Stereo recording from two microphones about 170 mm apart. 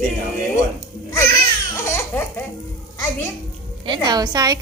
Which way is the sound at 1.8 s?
15° left (ahead or behind).